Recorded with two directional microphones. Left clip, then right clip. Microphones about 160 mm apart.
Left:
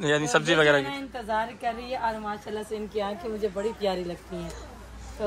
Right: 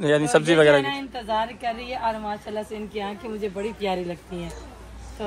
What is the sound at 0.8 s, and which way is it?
A woman's voice, 5° right (ahead or behind).